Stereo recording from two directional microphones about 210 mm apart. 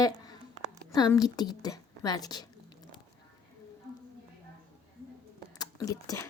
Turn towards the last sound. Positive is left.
turn(degrees=15)  # may be behind; listen again after turning